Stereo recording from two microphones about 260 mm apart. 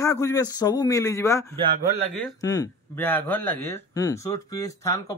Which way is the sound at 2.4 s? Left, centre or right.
Centre.